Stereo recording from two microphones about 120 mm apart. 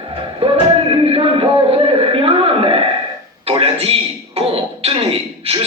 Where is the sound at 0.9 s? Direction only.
50° right (ahead or behind).